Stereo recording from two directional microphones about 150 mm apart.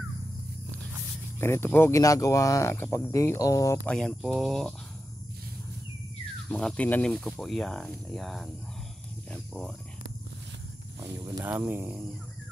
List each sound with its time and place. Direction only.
1.4 s speech: 15° left (ahead or behind)
3.8 s speech: 5° left (ahead or behind)
6.5 s speech: 10° left (ahead or behind)
9.5 s speech: centre (ahead or behind)
11.4 s speech: 10° right (ahead or behind)